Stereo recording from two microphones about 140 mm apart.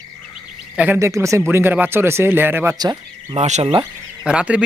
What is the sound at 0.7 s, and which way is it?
Speech, 15° right (ahead or behind).